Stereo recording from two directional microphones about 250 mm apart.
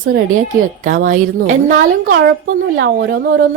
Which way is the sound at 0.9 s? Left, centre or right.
Right.